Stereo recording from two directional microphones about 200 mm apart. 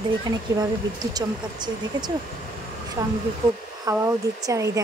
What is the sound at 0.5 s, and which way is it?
Speech, 15° right (ahead or behind).